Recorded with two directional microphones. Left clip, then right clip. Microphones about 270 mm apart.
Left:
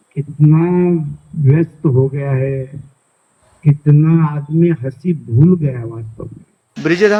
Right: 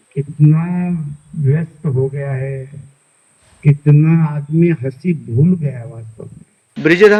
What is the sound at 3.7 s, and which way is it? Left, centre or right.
A man's voice, left.